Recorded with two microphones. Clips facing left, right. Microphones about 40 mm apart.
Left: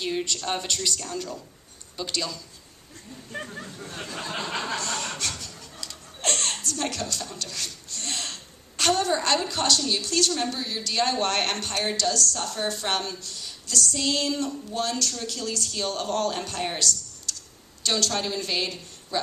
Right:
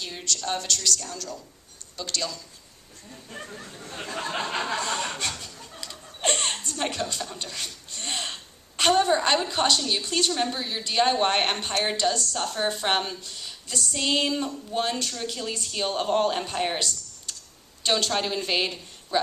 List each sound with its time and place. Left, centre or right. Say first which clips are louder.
0.0 s speech: left 3 dB; centre
2.0 s speech: left 1 dB; centre
4.0 s a sound: right 4 dB; right
4.4 s chuckle: even; right
5.5 s a woman's voice: right 1 dB; right